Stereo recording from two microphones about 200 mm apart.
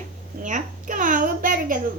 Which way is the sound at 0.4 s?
40° right (ahead or behind).